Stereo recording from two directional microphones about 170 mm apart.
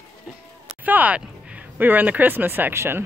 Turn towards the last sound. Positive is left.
turn(degrees=-15)  # may be behind; listen again after turning